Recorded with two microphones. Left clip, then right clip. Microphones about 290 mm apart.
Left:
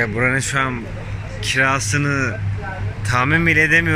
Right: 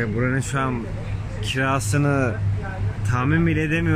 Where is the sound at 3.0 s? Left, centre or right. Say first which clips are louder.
Left 7 dB; centre.